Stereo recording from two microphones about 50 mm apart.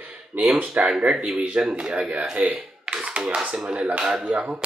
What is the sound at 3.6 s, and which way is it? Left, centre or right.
Whip, centre.